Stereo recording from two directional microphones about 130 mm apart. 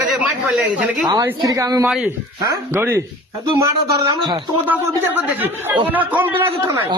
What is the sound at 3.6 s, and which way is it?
Speech, 35° right (ahead or behind).